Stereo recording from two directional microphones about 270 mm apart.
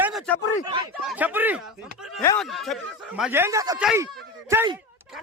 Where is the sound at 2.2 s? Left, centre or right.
Centre.